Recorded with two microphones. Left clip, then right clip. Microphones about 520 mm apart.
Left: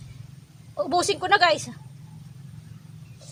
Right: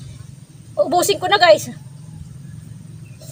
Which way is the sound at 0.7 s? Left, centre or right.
Left.